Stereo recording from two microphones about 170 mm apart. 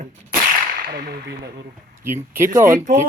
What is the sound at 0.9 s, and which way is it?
Whip, 65° right (ahead or behind).